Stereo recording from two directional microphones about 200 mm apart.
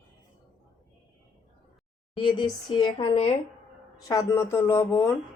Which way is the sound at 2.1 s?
25° left (ahead or behind).